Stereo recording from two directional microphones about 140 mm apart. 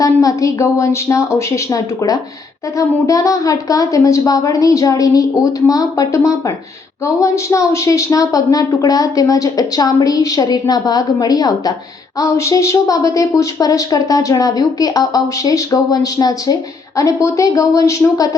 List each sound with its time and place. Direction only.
0.0 s a woman's voice: 25° left (ahead or behind)